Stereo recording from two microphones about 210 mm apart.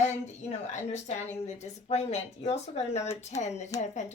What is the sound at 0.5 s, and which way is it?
A woman's voice, 35° left (ahead or behind).